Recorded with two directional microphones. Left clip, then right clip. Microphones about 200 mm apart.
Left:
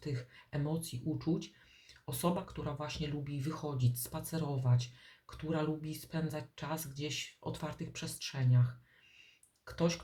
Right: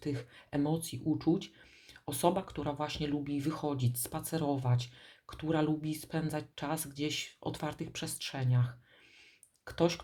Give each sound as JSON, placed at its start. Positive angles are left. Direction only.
{"t": 0.0, "sound": "speech", "side_deg": -45}
{"t": 9.6, "sound": "speech", "side_deg": -45}